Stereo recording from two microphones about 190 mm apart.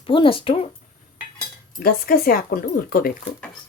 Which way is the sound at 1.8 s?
50° left (ahead or behind).